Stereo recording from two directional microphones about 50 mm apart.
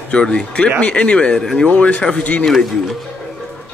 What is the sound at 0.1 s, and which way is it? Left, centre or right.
Speech, centre.